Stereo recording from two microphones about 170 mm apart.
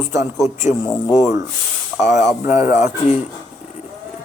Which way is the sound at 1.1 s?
Centre (ahead or behind).